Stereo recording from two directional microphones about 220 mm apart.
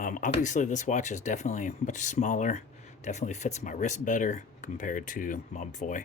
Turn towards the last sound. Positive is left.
turn(degrees=35)  # may be behind; listen again after turning